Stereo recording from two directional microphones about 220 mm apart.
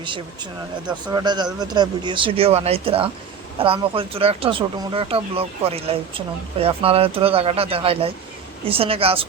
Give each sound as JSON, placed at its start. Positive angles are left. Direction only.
{"t": 1.0, "sound": "speech", "side_deg": -20}